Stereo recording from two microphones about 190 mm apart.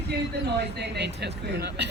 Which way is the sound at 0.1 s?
60° right (ahead or behind).